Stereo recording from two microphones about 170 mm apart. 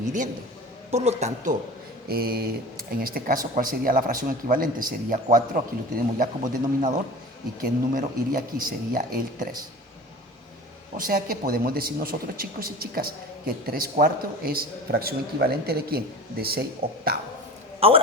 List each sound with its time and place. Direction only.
0.0 s a man's voice: 50° right (ahead or behind)
2.0 s a man's voice: 65° right (ahead or behind)
10.9 s a man's voice: 55° right (ahead or behind)
17.7 s a man's voice: 35° right (ahead or behind)